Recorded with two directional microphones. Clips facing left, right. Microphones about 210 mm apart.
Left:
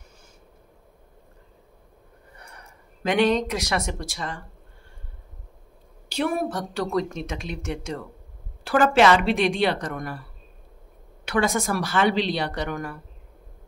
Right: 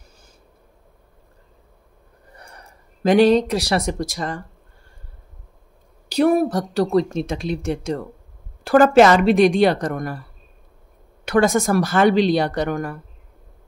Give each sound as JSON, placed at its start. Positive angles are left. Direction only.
{"t": 2.3, "sound": "speech", "side_deg": -35}
{"t": 6.0, "sound": "speech", "side_deg": -40}
{"t": 11.2, "sound": "speech", "side_deg": -45}